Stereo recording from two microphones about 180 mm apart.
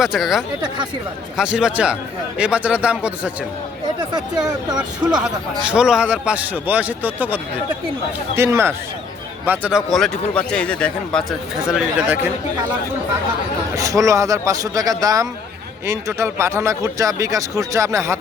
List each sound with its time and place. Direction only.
0.0 s a man's voice: centre (ahead or behind)
4.1 s speech: 20° right (ahead or behind)
5.2 s speech: 5° right (ahead or behind)
8.4 s a man's voice: 15° right (ahead or behind)
13.7 s speech: 20° right (ahead or behind)